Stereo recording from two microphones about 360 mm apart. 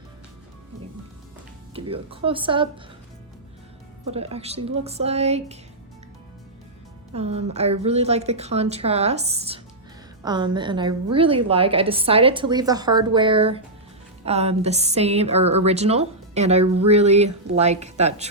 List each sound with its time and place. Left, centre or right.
1.7 s a woman's voice: centre
4.1 s a woman's voice: centre
7.1 s a woman's voice: centre